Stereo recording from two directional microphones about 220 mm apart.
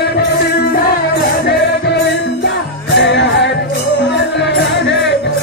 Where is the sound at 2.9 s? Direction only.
55° left (ahead or behind).